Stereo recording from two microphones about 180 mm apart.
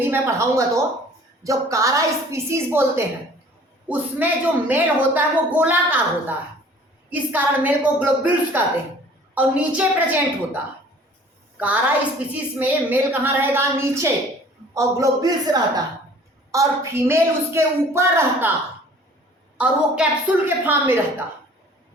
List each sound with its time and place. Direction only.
0.0 s a woman's voice: 15° right (ahead or behind)
12.3 s a woman's voice: 10° right (ahead or behind)
19.5 s a woman's voice: 5° right (ahead or behind)